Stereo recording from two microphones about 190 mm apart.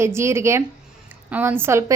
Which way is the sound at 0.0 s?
15° right (ahead or behind).